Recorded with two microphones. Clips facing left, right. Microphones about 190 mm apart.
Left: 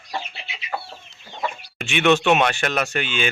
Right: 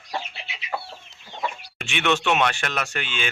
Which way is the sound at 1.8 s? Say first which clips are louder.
Left 6 dB; 5° left (ahead or behind).